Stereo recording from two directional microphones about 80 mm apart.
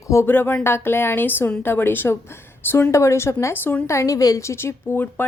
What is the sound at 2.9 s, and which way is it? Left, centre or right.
Speech, left.